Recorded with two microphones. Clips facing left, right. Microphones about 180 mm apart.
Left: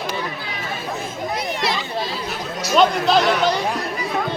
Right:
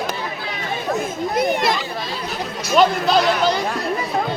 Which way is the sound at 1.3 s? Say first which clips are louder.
Right 5 dB; 50° right (ahead or behind).